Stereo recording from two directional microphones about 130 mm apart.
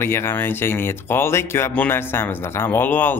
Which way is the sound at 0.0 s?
20° left (ahead or behind).